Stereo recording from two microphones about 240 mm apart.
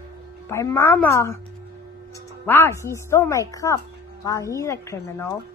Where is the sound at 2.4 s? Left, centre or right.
Centre.